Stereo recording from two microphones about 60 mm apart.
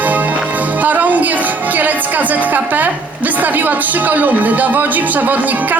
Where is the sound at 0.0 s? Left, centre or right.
Right.